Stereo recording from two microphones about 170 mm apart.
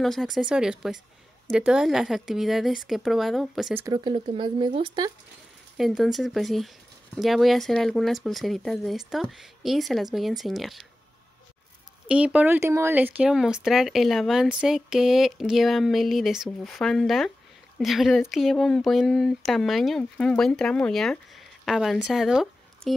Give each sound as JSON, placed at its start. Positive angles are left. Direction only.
{"t": 0.0, "sound": "speech", "side_deg": 0}
{"t": 3.7, "sound": "speech", "side_deg": -20}
{"t": 5.8, "sound": "speech", "side_deg": 0}
{"t": 12.1, "sound": "speech", "side_deg": -5}